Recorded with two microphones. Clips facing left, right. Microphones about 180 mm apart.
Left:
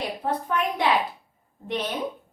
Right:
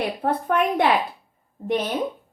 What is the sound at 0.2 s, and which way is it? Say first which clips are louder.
Speech: right 4 dB; 60° right (ahead or behind).